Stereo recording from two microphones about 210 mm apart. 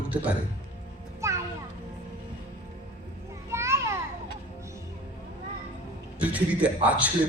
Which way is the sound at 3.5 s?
15° right (ahead or behind).